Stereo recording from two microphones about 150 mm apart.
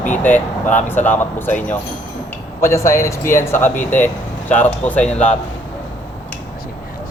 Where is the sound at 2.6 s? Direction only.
20° left (ahead or behind).